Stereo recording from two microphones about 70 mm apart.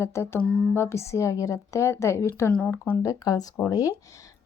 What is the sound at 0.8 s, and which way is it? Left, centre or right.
A woman's voice, left.